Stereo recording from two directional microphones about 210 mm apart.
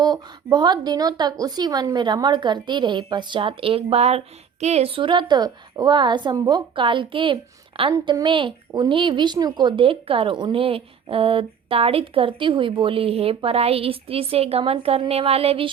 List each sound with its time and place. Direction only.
0.0 s a woman's voice: 20° right (ahead or behind)